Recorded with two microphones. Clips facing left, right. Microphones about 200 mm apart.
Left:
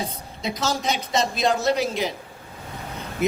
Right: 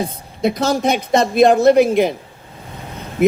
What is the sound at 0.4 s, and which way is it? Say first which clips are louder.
A man's voice: right 9 dB; 55° right (ahead or behind).